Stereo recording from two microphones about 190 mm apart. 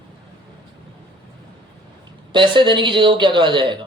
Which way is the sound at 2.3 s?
25° right (ahead or behind).